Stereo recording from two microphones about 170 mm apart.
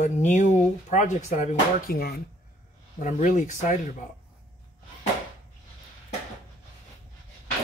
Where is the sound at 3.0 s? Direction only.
45° left (ahead or behind).